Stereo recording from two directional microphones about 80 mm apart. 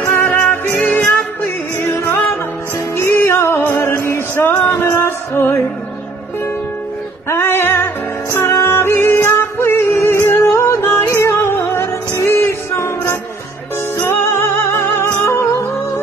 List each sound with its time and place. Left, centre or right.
0.3 s music: left
7.2 s music: left
14.0 s music: left